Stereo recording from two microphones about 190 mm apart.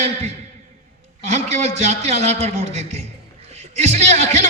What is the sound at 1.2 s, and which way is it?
A man's voice, 35° right (ahead or behind).